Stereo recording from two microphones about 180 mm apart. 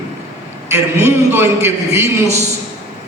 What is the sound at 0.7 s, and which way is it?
A man's voice, 15° right (ahead or behind).